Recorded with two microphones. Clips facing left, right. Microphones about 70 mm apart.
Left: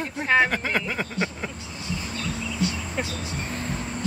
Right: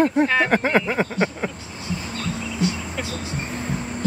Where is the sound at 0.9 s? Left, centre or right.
Right.